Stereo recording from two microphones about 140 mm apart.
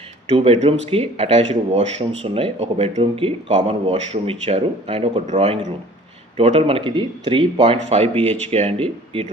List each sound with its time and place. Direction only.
0.3 s speech: 50° right (ahead or behind)
5.2 s speech: 55° right (ahead or behind)
8.1 s speech: 10° left (ahead or behind)
8.4 s speech: 45° right (ahead or behind)